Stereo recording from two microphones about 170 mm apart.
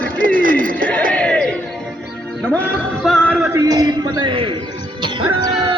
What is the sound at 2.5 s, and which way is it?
Music, centre (ahead or behind).